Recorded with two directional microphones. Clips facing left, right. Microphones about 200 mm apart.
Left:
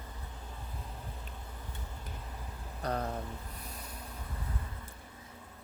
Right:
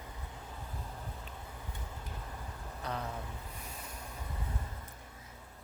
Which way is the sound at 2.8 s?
45° left (ahead or behind).